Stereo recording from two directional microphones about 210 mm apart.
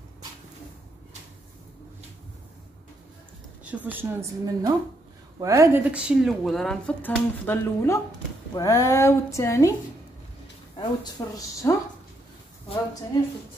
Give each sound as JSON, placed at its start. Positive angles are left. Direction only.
{"t": 3.6, "sound": "a woman's voice", "side_deg": -5}
{"t": 10.8, "sound": "speech", "side_deg": 15}